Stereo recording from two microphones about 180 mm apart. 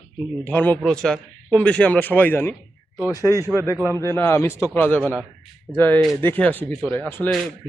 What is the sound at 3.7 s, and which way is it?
Speech, 10° right (ahead or behind).